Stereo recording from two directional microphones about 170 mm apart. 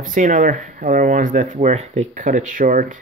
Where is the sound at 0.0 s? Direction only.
50° right (ahead or behind).